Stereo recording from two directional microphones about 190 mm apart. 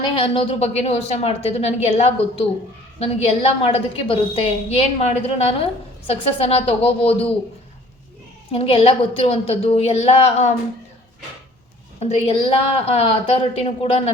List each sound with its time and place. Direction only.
0.0 s a woman's voice: 25° left (ahead or behind)
8.5 s a woman's voice: 30° left (ahead or behind)
11.9 s a woman's voice: 35° left (ahead or behind)